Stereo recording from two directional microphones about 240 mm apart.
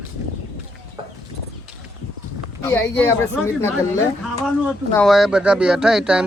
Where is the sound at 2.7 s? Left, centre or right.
Centre.